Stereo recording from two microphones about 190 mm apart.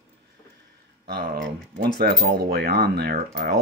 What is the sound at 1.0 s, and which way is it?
Speech, 55° right (ahead or behind).